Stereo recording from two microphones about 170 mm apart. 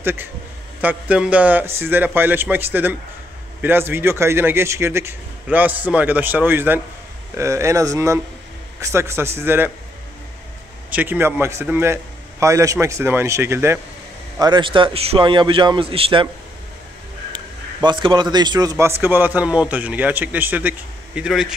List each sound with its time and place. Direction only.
0.0 s a man's voice: 10° right (ahead or behind)
10.9 s a man's voice: 10° right (ahead or behind)
14.4 s a man's voice: 30° right (ahead or behind)
17.8 s a man's voice: 25° right (ahead or behind); by 21.5 s 5° right (ahead or behind)